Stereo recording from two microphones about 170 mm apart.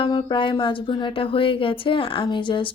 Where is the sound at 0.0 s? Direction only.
25° left (ahead or behind).